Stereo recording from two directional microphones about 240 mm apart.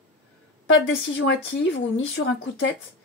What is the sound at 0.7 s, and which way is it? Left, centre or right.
Speech, left.